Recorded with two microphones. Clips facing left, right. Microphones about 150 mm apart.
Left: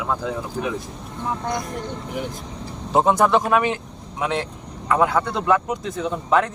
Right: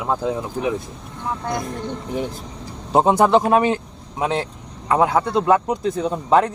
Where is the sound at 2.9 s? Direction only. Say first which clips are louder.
Right 2 dB; 30° right (ahead or behind).